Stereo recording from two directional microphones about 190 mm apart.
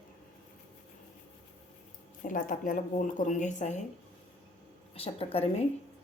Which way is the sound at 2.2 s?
45° left (ahead or behind).